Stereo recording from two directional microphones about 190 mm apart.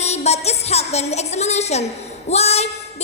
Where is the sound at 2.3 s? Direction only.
35° left (ahead or behind).